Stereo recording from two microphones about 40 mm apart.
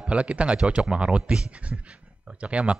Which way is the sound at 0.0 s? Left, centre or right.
Right.